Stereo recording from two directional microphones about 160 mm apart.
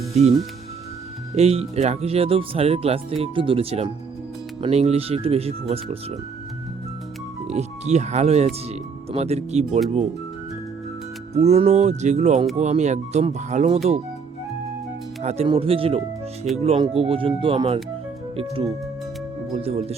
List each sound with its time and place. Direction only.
0.1 s speech: 40° right (ahead or behind)
1.4 s speech: 40° right (ahead or behind)
7.5 s speech: 45° right (ahead or behind)
11.3 s speech: 40° right (ahead or behind)
15.2 s speech: 45° right (ahead or behind)